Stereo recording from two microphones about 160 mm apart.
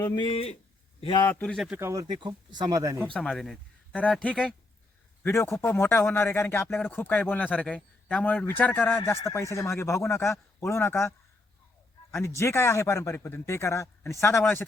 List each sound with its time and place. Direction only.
0.2 s speech: 35° left (ahead or behind)
1.2 s a man's voice: 10° left (ahead or behind)
1.5 s speech: centre (ahead or behind)
1.8 s speech: 20° right (ahead or behind)
3.0 s a man's voice: 5° left (ahead or behind)
12.2 s a man's voice: 15° left (ahead or behind)